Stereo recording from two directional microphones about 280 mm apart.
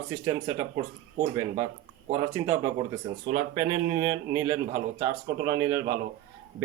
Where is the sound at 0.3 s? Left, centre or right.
Centre.